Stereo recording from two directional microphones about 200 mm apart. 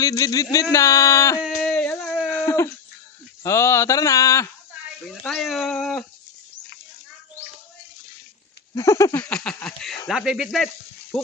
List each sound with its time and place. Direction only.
0.0 s speech: 15° left (ahead or behind)
1.5 s a sound: 5° left (ahead or behind)
3.4 s speech: 15° left (ahead or behind)
5.0 s speech: centre (ahead or behind)
8.7 s speech: 15° left (ahead or behind); by 10.7 s centre (ahead or behind)